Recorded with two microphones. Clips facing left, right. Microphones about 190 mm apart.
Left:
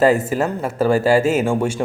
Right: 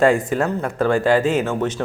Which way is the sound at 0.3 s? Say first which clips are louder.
Even; 5° left (ahead or behind).